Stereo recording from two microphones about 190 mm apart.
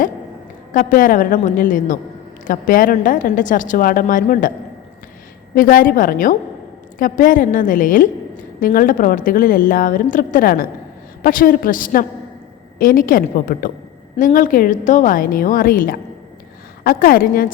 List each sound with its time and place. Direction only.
0.7 s a woman's voice: 45° left (ahead or behind)
5.5 s a woman's voice: 45° left (ahead or behind)